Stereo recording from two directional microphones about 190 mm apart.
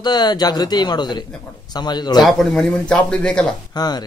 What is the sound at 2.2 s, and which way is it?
Speech, 5° left (ahead or behind).